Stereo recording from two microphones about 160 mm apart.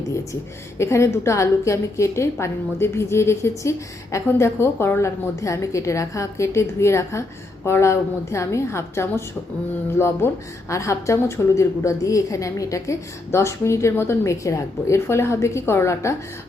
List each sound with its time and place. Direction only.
0.8 s a woman's voice: 15° left (ahead or behind)